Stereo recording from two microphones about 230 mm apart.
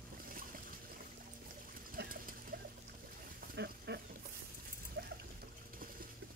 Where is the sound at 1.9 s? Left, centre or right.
Right.